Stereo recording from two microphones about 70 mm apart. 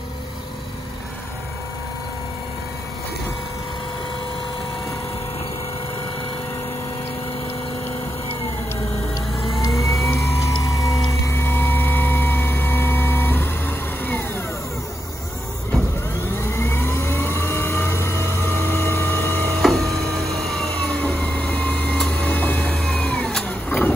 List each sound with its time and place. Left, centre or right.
9.1 s vehicle: left
10.1 s music: left
11.3 s vehicle: left
16.3 s vehicle: left
19.6 s printer: centre
20.4 s vehicle: centre
20.7 s printer: centre
22.8 s cat: centre
23.4 s a sound: left